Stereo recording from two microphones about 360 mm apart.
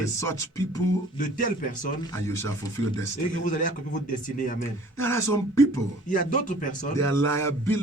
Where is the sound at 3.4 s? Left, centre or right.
Left.